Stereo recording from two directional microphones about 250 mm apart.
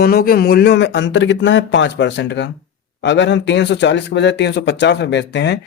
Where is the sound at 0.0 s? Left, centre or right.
Left.